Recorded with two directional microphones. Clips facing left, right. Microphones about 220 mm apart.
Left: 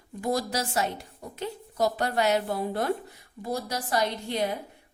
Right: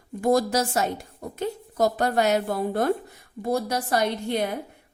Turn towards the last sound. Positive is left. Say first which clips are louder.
# right 4 dB
turn(degrees=-55)  # may be behind; listen again after turning